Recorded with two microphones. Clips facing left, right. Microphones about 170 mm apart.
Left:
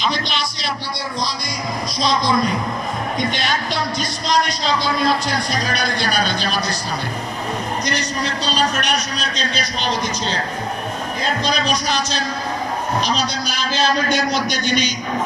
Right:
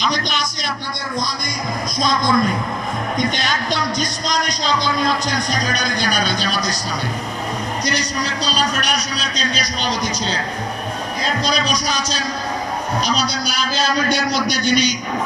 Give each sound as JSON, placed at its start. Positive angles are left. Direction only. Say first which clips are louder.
{"t": 0.1, "sound": "a man's voice", "louder": "right 1 dB", "side_deg": -45}
{"t": 2.0, "sound": "a man's voice", "louder": "right 1 dB", "side_deg": -50}
{"t": 7.9, "sound": "a man's voice", "louder": "even", "side_deg": -35}
{"t": 11.4, "sound": "a man's voice", "louder": "even", "side_deg": -35}